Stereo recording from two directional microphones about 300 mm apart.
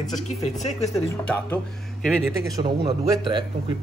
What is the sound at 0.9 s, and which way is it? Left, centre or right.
Speech, centre.